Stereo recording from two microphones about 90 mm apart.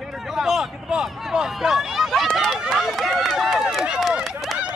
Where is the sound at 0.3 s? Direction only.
5° right (ahead or behind).